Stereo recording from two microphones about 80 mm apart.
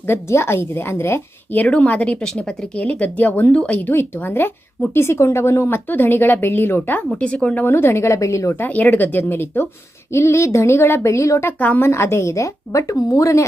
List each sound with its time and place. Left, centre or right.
0.1 s a woman's voice: left
1.6 s speech: centre; by 8.6 s left
8.6 s a woman's voice: left
11.6 s speech: left
11.9 s a woman's voice: left